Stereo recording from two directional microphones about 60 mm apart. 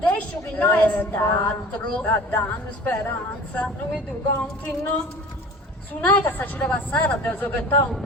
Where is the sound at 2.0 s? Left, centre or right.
Left.